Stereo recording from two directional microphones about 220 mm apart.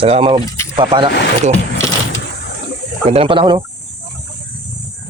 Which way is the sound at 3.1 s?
25° right (ahead or behind).